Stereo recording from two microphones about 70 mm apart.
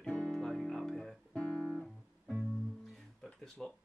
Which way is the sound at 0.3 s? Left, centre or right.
Centre.